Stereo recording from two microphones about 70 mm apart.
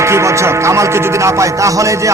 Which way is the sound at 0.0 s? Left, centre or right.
Right.